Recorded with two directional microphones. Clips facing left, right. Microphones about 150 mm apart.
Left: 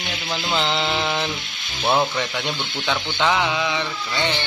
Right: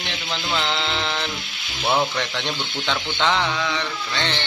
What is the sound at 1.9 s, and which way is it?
Speech, 10° left (ahead or behind).